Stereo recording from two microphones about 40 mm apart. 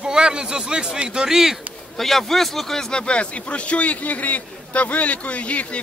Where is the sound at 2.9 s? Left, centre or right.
Left.